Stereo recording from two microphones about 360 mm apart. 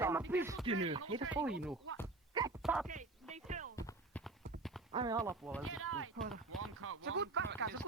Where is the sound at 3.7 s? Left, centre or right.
Centre.